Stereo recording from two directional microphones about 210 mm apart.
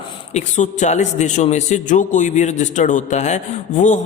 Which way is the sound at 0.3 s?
35° left (ahead or behind).